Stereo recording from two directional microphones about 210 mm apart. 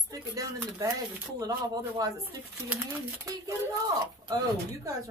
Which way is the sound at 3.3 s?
15° right (ahead or behind).